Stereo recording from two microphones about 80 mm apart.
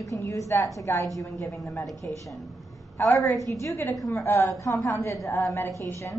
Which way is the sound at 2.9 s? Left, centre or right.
Left.